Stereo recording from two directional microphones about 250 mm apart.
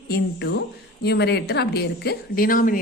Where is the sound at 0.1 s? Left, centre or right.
Left.